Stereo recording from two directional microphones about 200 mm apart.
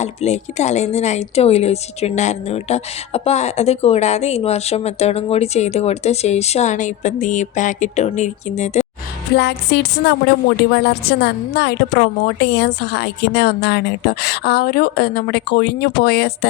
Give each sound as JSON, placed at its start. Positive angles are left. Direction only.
{"t": 0.0, "sound": "a woman's voice", "side_deg": 35}
{"t": 9.3, "sound": "a woman's voice", "side_deg": 55}